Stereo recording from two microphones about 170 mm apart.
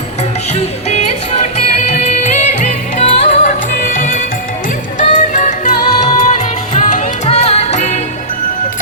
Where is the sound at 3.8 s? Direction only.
55° left (ahead or behind).